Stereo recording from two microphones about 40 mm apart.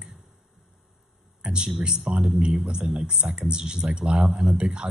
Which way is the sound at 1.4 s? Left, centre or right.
Right.